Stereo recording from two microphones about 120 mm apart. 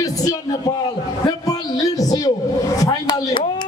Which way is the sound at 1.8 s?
30° left (ahead or behind).